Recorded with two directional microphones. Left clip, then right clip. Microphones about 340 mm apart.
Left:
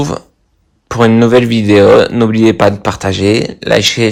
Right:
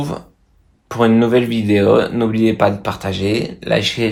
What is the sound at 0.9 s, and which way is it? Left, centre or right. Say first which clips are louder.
Speech: left 6 dB; left.